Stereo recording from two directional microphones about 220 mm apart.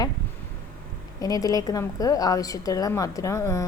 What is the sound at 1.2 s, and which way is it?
A woman's voice, 15° left (ahead or behind).